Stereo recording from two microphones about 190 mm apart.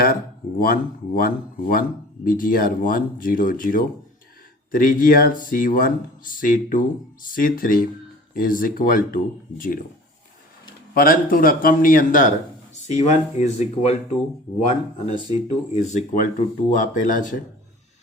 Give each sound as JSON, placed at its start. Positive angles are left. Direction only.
{"t": 0.6, "sound": "speech", "side_deg": 50}
{"t": 10.9, "sound": "speech", "side_deg": 50}